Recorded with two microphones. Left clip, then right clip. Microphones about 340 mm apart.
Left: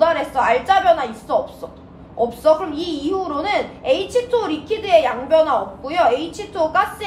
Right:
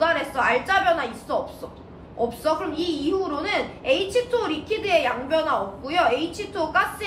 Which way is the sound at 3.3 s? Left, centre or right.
Left.